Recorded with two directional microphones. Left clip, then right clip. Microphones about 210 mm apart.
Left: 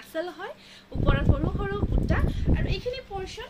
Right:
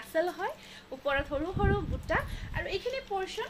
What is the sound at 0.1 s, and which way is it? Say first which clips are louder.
Speech: right 2 dB; 15° left (ahead or behind).